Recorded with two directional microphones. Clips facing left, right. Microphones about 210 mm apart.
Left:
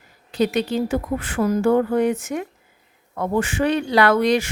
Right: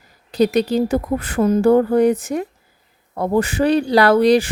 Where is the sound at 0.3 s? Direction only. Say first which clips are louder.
Right 4 dB; 40° right (ahead or behind).